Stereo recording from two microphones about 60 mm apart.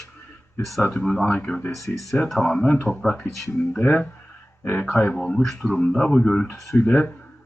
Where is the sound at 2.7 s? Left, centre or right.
Left.